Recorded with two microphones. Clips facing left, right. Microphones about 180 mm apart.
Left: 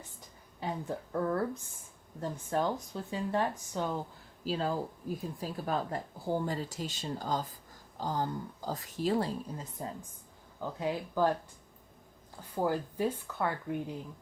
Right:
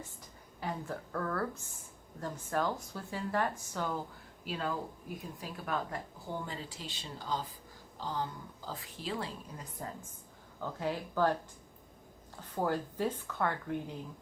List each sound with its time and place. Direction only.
0.6 s speech: 20° left (ahead or behind); by 9.3 s 40° left (ahead or behind)
9.6 s a woman's voice: 20° left (ahead or behind)
12.4 s a woman's voice: 10° left (ahead or behind)